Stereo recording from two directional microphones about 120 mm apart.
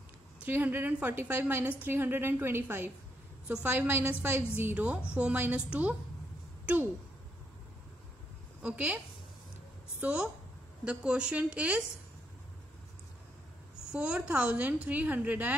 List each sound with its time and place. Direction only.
0.5 s a woman's voice: 15° right (ahead or behind)
8.6 s a woman's voice: 10° right (ahead or behind)
13.9 s a woman's voice: 10° right (ahead or behind)